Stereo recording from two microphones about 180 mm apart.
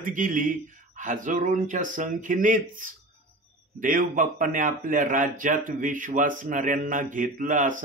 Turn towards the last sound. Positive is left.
turn(degrees=-45)  # may be behind; listen again after turning